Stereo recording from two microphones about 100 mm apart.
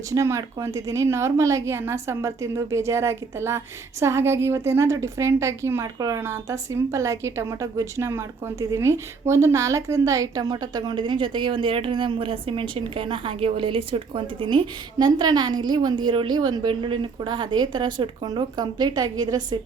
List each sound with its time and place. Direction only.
0.1 s a woman's voice: 30° right (ahead or behind)